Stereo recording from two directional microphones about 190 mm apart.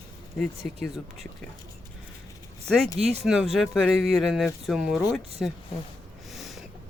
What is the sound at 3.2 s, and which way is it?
Speech, centre (ahead or behind).